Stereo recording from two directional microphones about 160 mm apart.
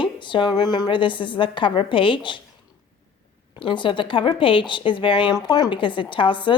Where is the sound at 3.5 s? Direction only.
30° left (ahead or behind).